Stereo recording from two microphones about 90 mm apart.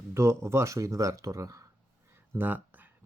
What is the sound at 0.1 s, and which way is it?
Speech, 30° right (ahead or behind).